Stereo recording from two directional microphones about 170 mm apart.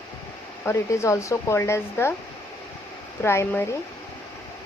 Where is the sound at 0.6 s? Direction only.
15° left (ahead or behind).